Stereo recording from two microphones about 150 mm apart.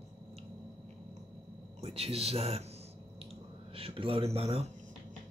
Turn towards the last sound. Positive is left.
turn(degrees=-40)  # may be behind; listen again after turning